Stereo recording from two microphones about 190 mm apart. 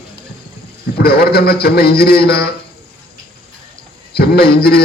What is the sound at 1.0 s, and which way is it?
A man's voice, 55° left (ahead or behind).